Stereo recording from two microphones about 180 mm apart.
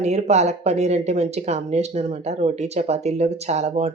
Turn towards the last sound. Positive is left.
turn(degrees=-40)  # may be behind; listen again after turning